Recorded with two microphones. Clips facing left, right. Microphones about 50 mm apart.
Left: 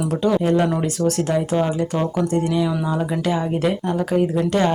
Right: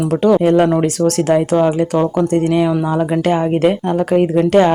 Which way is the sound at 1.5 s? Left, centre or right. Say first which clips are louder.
Right 7 dB; right.